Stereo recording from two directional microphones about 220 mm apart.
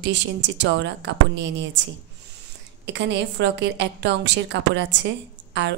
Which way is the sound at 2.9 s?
55° right (ahead or behind).